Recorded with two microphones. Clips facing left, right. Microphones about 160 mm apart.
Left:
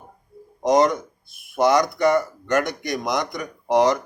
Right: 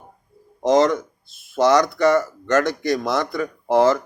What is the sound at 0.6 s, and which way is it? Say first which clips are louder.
Speech: right 1 dB; 15° left (ahead or behind).